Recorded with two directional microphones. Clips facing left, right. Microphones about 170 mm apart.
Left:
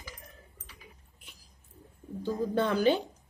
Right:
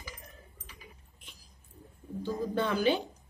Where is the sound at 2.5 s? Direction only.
35° left (ahead or behind).